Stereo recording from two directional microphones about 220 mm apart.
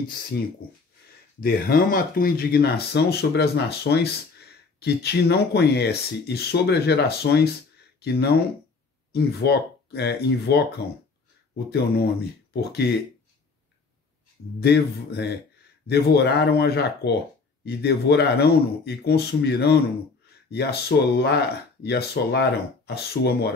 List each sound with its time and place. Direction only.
0.3 s speech: 50° left (ahead or behind)
14.6 s speech: 45° left (ahead or behind)
20.9 s speech: 50° left (ahead or behind)